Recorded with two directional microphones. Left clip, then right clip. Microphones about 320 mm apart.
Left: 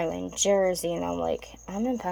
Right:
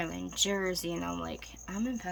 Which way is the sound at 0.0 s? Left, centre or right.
Right.